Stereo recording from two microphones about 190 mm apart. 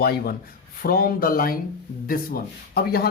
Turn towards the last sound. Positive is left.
turn(degrees=55)  # may be behind; listen again after turning